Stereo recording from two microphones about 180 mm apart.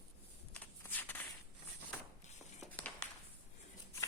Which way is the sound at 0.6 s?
10° left (ahead or behind).